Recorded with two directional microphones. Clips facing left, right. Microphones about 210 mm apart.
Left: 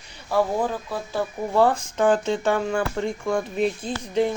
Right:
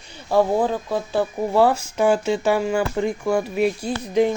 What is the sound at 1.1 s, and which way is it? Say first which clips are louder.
Speech: right 2 dB; 10° right (ahead or behind).